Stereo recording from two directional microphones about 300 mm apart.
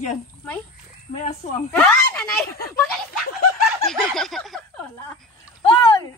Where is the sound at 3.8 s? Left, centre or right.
Centre.